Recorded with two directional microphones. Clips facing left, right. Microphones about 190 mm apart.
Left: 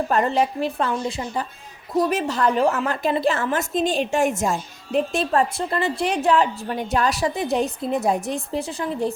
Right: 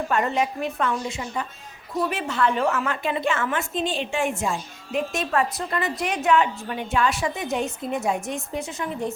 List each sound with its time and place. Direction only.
0.1 s a woman's voice: 35° left (ahead or behind)